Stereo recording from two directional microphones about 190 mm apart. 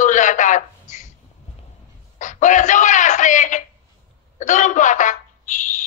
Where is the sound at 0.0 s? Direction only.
40° left (ahead or behind).